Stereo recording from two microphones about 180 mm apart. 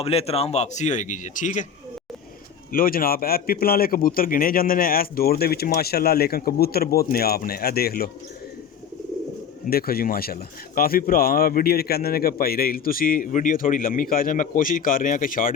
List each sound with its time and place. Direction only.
0.0 s a man's voice: 35° left (ahead or behind)
2.7 s a man's voice: 50° left (ahead or behind)
9.6 s a man's voice: 55° left (ahead or behind)